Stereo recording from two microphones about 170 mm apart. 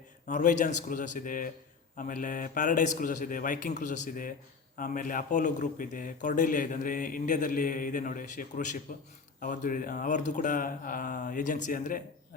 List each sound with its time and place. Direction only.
0.3 s a man's voice: 50° left (ahead or behind)